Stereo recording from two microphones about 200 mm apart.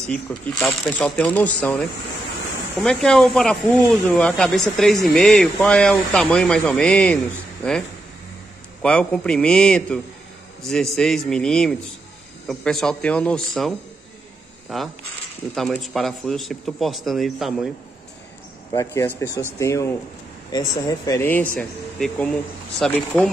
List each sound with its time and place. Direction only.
0.1 s speech: 5° left (ahead or behind)
8.8 s speech: 5° left (ahead or behind)
18.7 s speech: 15° left (ahead or behind)